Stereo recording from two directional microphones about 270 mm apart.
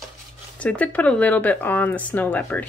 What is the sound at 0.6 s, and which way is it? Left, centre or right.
Speech, centre.